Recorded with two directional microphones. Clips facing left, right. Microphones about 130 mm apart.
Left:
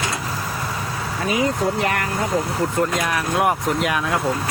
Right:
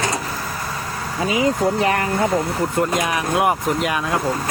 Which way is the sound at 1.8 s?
30° right (ahead or behind).